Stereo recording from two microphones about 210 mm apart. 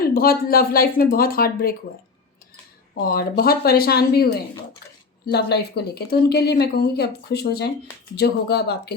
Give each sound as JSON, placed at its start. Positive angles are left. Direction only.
{"t": 0.0, "sound": "speech", "side_deg": 45}
{"t": 2.9, "sound": "speech", "side_deg": 45}